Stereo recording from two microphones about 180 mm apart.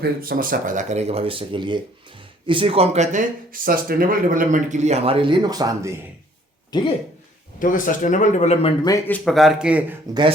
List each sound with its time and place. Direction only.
0.0 s speech: 55° right (ahead or behind); by 5.9 s 20° right (ahead or behind)
6.7 s speech: 25° left (ahead or behind)
7.6 s a man's voice: 45° left (ahead or behind)
8.8 s speech: 20° left (ahead or behind); by 10.0 s 5° right (ahead or behind)